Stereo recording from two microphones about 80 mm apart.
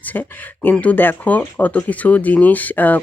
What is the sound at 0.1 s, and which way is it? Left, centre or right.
Speech, left.